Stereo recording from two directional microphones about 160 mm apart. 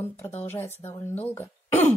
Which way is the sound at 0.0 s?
10° left (ahead or behind).